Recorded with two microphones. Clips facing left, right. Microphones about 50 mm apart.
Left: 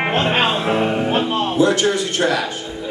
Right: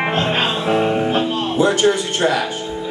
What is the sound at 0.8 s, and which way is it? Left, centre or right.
Music, centre.